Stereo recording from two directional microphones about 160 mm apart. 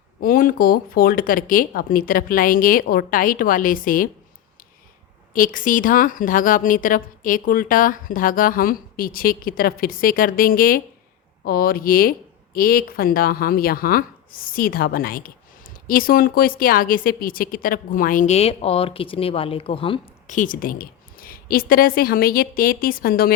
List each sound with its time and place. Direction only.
0.2 s speech: 60° left (ahead or behind)
5.3 s speech: 60° left (ahead or behind); by 20.0 s 35° left (ahead or behind)
20.2 s speech: 55° left (ahead or behind)